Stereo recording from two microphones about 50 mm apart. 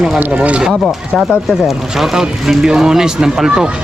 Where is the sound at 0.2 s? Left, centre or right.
Right.